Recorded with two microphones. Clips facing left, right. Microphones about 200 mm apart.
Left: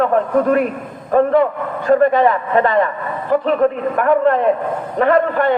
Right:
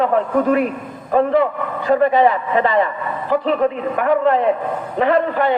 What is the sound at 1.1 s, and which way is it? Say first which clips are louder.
A man's voice: left 2 dB; 50° left (ahead or behind).